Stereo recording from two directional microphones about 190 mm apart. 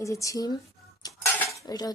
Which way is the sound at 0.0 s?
15° left (ahead or behind).